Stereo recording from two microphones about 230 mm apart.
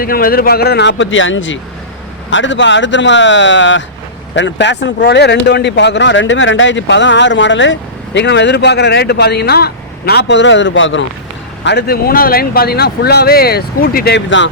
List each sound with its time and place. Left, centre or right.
0.0 s speech: left